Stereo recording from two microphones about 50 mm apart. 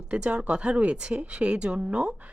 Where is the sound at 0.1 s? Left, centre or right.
Right.